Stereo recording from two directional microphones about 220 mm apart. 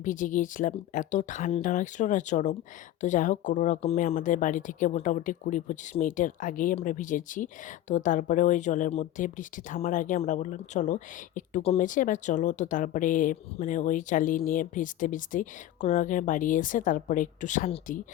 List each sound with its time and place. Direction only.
0.0 s speech: 35° left (ahead or behind)